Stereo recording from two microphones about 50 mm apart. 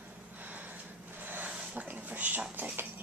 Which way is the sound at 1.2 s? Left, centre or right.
Right.